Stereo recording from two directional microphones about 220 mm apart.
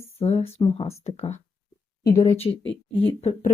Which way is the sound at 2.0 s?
40° left (ahead or behind).